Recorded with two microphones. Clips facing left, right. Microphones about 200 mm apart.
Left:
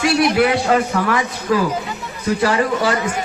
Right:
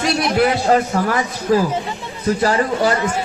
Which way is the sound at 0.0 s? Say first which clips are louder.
Left 1 dB; 40° right (ahead or behind).